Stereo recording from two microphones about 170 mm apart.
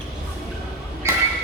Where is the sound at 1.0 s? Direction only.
15° right (ahead or behind).